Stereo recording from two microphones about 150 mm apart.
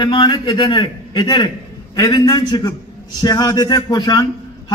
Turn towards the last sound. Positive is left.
turn(degrees=25)  # may be behind; listen again after turning